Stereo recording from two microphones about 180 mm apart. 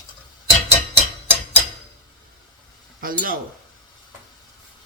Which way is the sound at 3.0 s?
55° right (ahead or behind).